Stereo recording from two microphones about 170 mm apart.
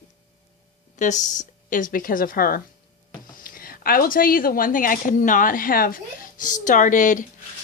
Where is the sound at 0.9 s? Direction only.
45° left (ahead or behind).